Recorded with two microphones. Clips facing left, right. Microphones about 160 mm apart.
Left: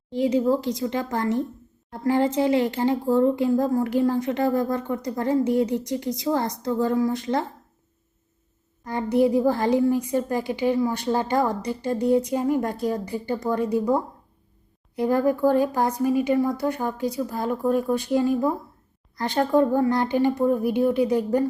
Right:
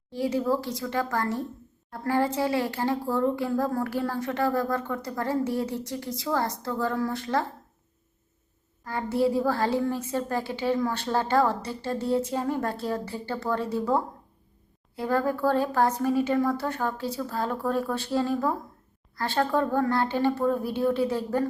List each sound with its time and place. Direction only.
0.1 s a child's voice: 20° left (ahead or behind)
8.8 s speech: 20° left (ahead or behind)